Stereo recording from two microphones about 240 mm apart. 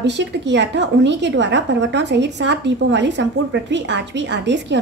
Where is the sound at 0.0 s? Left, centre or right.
Right.